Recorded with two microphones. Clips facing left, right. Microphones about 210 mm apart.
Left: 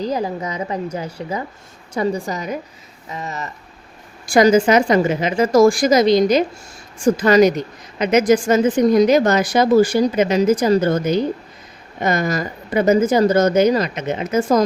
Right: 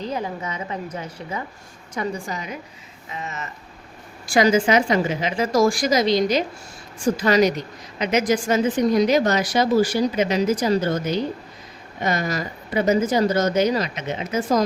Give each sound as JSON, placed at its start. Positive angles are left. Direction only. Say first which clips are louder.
{"t": 0.0, "sound": "a woman's voice", "louder": "left 5 dB", "side_deg": 35}
{"t": 12.0, "sound": "speech", "louder": "left 4 dB", "side_deg": 50}